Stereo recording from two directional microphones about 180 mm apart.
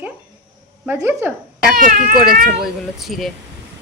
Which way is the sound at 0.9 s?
10° right (ahead or behind).